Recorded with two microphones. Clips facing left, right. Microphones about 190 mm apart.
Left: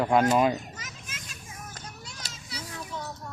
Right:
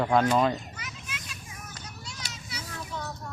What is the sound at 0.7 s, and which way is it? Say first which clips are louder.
Children playing: right 2 dB; 40° left (ahead or behind).